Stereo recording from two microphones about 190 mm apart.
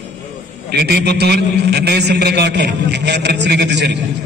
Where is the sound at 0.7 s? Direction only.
60° right (ahead or behind).